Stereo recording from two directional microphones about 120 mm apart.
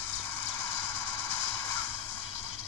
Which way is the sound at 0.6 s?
20° left (ahead or behind).